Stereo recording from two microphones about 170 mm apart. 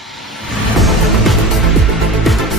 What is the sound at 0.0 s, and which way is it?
Music, centre (ahead or behind).